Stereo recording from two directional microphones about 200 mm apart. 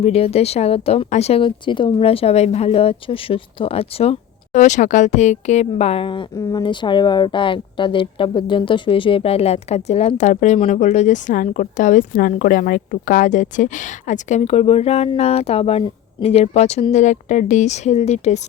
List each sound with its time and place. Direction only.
0.0 s speech: 30° left (ahead or behind)